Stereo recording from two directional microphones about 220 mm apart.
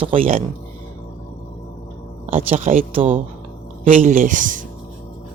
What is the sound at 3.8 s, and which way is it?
Speech, 35° right (ahead or behind).